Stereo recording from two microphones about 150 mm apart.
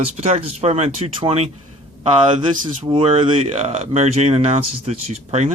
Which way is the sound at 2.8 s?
40° right (ahead or behind).